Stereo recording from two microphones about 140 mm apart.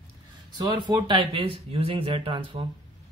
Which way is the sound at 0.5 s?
30° right (ahead or behind).